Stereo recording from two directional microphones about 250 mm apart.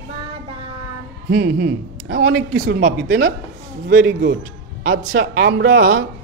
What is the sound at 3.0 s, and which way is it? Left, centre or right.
A man's voice, right.